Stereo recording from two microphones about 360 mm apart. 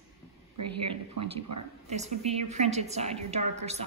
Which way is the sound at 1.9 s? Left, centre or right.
Centre.